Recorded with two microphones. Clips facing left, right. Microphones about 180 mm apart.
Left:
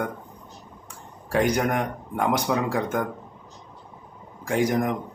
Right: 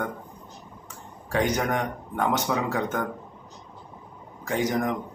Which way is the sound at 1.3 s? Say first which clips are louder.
Left 2 dB; 10° left (ahead or behind).